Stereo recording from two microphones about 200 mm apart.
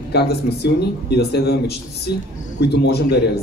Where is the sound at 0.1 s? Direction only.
55° left (ahead or behind).